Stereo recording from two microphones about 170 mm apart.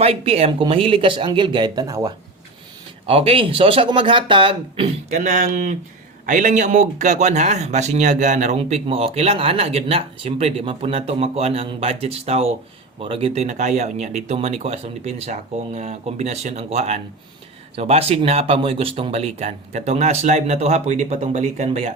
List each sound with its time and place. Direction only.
0.0 s speech: 35° right (ahead or behind)
3.1 s speech: 35° right (ahead or behind)